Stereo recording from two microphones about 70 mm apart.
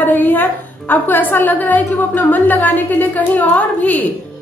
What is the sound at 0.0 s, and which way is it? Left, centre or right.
A woman's voice, left.